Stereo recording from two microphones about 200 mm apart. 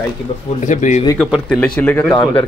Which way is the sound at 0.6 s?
40° left (ahead or behind).